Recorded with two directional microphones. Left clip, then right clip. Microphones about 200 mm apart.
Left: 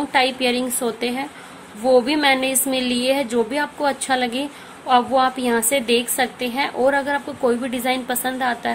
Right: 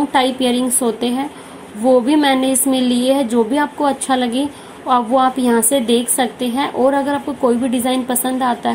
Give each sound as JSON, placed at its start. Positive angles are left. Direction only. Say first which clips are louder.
{"t": 0.1, "sound": "a woman's voice", "louder": "left 1 dB", "side_deg": 0}